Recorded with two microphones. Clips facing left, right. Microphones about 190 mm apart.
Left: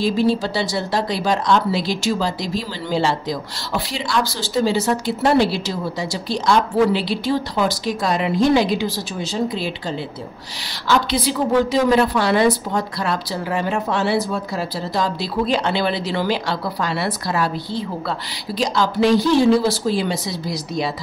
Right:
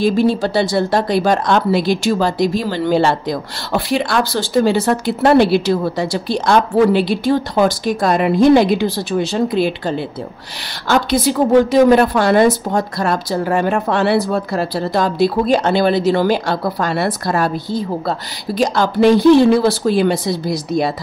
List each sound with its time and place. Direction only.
0.0 s speech: 55° right (ahead or behind)
10.9 s a woman's voice: 50° right (ahead or behind)